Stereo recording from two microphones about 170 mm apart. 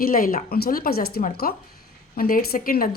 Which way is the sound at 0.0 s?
55° left (ahead or behind).